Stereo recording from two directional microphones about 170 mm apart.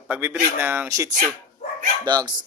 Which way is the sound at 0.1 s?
10° right (ahead or behind).